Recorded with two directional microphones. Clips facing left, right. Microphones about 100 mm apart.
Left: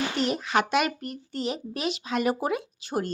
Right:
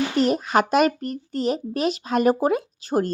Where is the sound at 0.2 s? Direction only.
40° right (ahead or behind).